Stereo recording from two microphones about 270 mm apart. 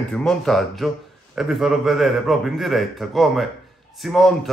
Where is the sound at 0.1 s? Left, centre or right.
Centre.